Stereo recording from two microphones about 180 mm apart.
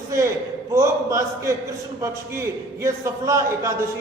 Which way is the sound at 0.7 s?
15° right (ahead or behind).